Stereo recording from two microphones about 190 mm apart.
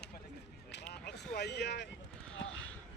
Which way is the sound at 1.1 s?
60° left (ahead or behind).